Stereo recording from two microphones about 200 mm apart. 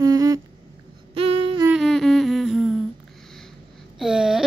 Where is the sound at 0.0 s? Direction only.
20° right (ahead or behind).